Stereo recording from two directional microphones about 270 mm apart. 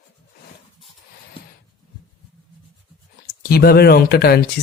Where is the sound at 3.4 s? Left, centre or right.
Left.